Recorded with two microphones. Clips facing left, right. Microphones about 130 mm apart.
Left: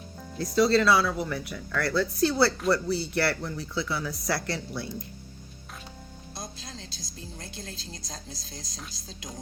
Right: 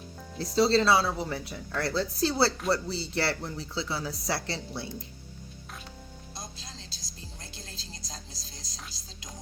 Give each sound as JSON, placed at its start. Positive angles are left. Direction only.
{"t": 0.5, "sound": "speech", "side_deg": -25}
{"t": 6.3, "sound": "music", "side_deg": 55}